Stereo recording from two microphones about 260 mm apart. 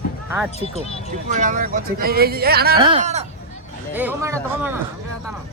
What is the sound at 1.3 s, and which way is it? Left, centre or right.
Speech, right.